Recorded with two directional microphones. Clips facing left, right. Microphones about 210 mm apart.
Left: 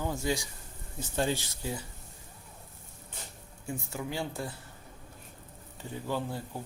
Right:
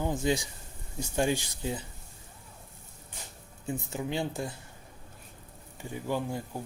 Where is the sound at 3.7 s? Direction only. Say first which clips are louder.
Right 3 dB; 20° right (ahead or behind).